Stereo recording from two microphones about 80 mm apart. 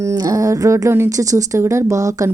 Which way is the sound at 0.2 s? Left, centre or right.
Right.